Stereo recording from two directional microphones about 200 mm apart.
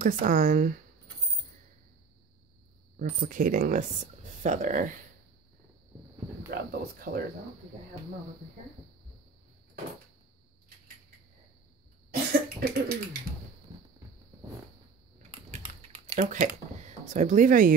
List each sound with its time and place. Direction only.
0.0 s speech: 45° right (ahead or behind)
3.0 s speech: 45° right (ahead or behind)
6.5 s speech: 50° right (ahead or behind)
12.3 s cough: 50° right (ahead or behind)
15.3 s typing: 30° right (ahead or behind)
17.1 s speech: 40° right (ahead or behind)